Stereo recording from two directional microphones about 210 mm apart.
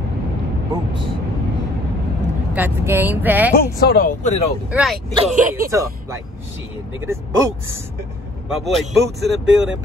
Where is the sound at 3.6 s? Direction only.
50° left (ahead or behind); by 4.5 s 35° left (ahead or behind).